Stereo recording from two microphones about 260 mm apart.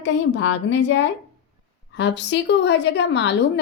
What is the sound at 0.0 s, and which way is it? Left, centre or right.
A woman's voice, left.